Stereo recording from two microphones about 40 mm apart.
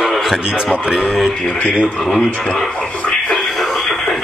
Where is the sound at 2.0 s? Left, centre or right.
Centre.